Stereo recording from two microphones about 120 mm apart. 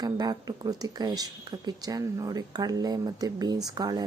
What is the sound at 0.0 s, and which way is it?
Speech, 35° right (ahead or behind).